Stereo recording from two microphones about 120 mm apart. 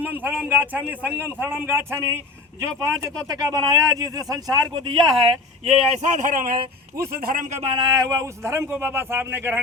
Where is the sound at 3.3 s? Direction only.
30° right (ahead or behind).